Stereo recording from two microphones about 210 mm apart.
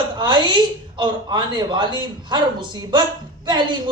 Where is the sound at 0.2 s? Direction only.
20° right (ahead or behind).